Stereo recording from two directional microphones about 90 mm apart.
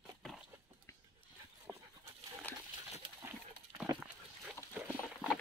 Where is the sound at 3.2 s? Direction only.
30° right (ahead or behind).